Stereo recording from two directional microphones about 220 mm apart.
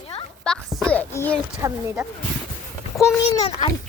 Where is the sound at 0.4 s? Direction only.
Centre (ahead or behind).